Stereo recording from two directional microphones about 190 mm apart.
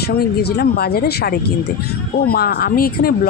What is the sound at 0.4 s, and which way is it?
Speech, 55° left (ahead or behind).